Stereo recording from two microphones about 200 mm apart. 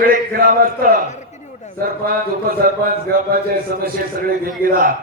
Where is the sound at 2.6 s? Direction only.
45° right (ahead or behind).